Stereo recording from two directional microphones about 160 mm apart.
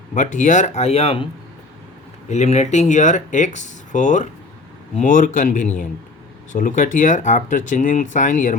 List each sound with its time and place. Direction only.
0.1 s speech: 50° left (ahead or behind)
2.3 s speech: 45° left (ahead or behind)